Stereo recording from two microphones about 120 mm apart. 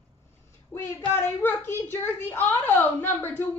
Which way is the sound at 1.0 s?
20° left (ahead or behind).